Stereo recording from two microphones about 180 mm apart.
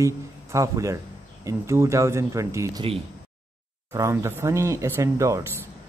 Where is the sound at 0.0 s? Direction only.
15° right (ahead or behind).